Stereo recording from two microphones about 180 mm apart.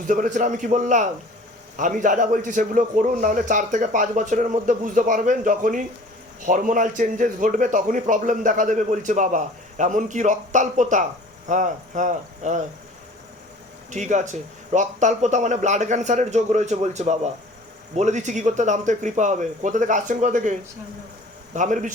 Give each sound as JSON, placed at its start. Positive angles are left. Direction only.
{"t": 0.1, "sound": "a man's voice", "side_deg": -45}
{"t": 13.9, "sound": "a man's voice", "side_deg": -40}